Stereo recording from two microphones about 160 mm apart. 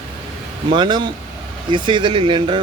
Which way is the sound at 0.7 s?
30° right (ahead or behind).